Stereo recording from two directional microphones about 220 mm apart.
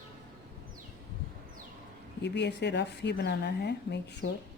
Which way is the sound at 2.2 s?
50° left (ahead or behind).